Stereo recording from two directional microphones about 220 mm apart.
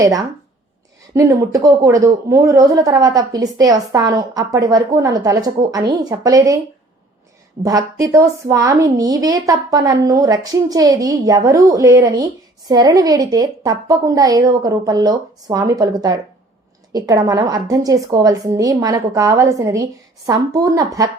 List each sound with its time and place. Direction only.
0.0 s speech: 15° right (ahead or behind)
7.6 s speech: 15° right (ahead or behind)